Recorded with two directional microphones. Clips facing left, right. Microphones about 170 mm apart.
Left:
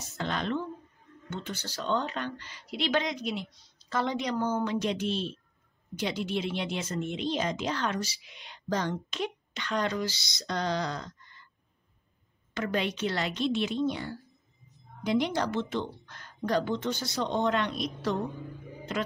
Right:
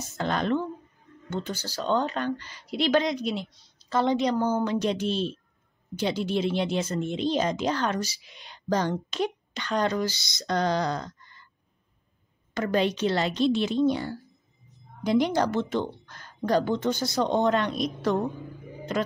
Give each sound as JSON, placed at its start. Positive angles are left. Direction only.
{"t": 0.2, "sound": "speech", "side_deg": -45}
{"t": 12.5, "sound": "speech", "side_deg": -40}